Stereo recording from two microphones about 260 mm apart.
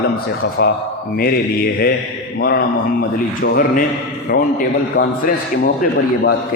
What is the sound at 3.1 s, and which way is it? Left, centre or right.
A man's voice, left.